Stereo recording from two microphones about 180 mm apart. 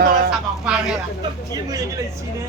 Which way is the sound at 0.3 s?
5° right (ahead or behind).